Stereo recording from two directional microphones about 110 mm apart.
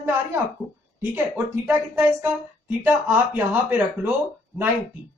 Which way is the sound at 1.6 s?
20° right (ahead or behind).